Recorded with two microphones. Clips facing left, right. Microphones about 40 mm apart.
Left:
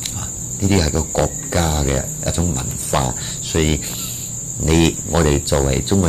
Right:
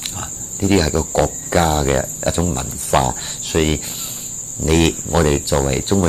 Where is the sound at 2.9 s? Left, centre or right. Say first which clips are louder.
Right 4 dB; centre.